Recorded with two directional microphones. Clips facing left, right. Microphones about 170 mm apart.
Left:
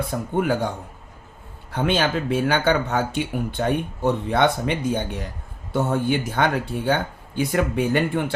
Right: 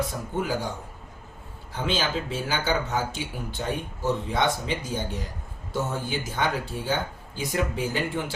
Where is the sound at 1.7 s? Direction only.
65° left (ahead or behind).